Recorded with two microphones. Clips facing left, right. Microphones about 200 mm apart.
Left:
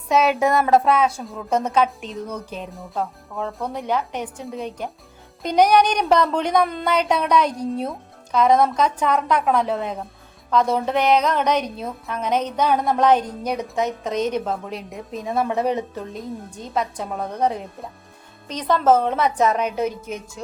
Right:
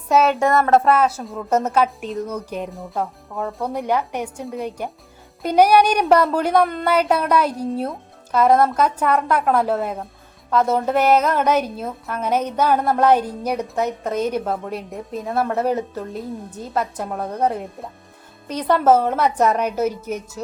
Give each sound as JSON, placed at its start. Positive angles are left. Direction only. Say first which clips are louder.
{"t": 0.1, "sound": "a woman's voice", "louder": "right 1 dB", "side_deg": 0}